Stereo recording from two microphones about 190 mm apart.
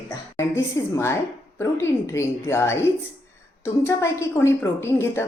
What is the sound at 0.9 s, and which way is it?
A woman's voice, 15° left (ahead or behind).